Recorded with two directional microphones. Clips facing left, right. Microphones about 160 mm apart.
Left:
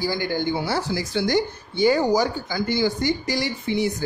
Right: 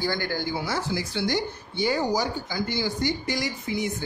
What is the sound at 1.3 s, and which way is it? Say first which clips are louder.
Speech: left 5 dB; 90° left.